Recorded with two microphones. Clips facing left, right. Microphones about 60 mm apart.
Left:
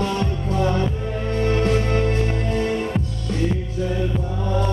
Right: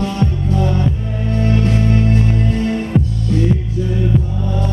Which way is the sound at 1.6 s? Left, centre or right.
Left.